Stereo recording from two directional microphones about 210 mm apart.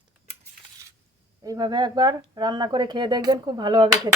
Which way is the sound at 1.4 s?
15° right (ahead or behind).